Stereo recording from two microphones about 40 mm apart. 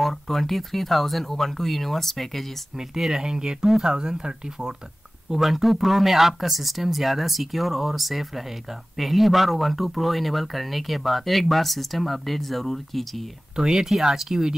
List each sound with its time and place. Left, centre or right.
0.0 s speech: centre
2.7 s speech: centre
5.3 s speech: centre
13.6 s speech: centre